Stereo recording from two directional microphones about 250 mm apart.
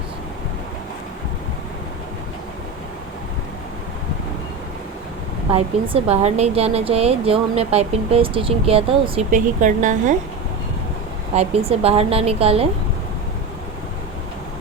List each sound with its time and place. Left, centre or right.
5.5 s a woman's voice: right
11.3 s a woman's voice: right